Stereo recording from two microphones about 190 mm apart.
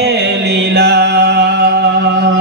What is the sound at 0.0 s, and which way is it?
Music, 65° right (ahead or behind).